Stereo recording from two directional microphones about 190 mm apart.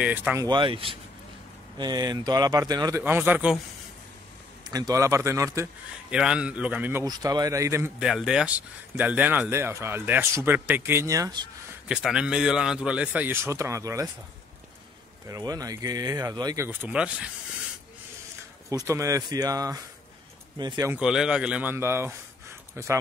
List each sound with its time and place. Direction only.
0.0 s speech: 10° right (ahead or behind)
0.5 s speech: 25° right (ahead or behind); by 3.5 s 10° right (ahead or behind)
4.6 s speech: 20° right (ahead or behind)
6.1 s speech: 5° right (ahead or behind)
8.0 s speech: 5° right (ahead or behind)
11.9 s speech: 5° right (ahead or behind)
15.2 s speech: 20° right (ahead or behind)
18.9 s speech: 15° right (ahead or behind)
21.0 s a man's voice: 5° right (ahead or behind)